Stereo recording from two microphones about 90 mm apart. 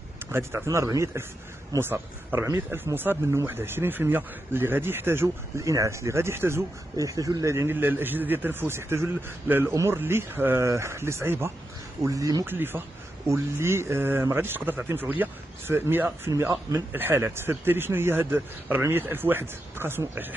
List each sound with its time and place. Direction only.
0.3 s speech: 25° right (ahead or behind)
7.0 s speech: 40° right (ahead or behind)
7.7 s speech: 20° right (ahead or behind)
12.0 s speech: 40° right (ahead or behind)
12.4 s speech: 25° right (ahead or behind)
16.3 s speech: 35° right (ahead or behind)